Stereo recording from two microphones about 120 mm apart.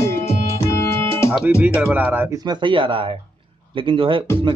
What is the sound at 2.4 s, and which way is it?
Speech, 45° right (ahead or behind).